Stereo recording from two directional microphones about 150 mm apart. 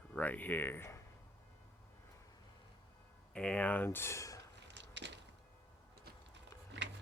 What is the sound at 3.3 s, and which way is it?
Speech, 5° left (ahead or behind).